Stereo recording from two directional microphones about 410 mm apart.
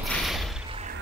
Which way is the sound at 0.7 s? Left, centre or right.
Centre.